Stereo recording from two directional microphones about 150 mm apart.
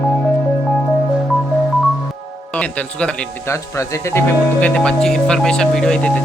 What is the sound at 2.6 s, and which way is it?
Speech, 10° left (ahead or behind).